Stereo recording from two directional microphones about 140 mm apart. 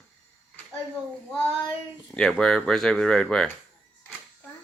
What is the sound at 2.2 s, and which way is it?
Speech, 5° left (ahead or behind).